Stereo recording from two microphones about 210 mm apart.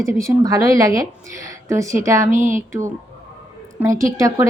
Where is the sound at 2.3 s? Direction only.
40° right (ahead or behind).